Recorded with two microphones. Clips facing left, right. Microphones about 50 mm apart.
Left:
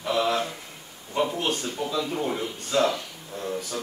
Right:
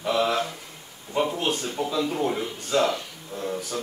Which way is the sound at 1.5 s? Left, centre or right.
Centre.